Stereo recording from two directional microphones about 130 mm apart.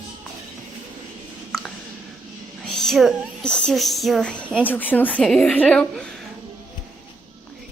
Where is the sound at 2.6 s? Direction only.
5° left (ahead or behind).